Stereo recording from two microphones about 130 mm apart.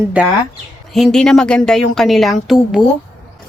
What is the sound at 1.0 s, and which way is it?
A woman's voice, 5° left (ahead or behind).